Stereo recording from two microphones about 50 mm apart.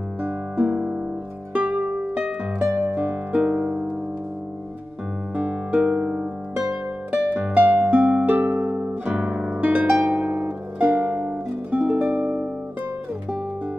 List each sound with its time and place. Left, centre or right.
0.2 s music: right
5.3 s music: right
7.1 s harp: right
9.1 s guitar: centre
9.8 s harp: centre
11.7 s music: right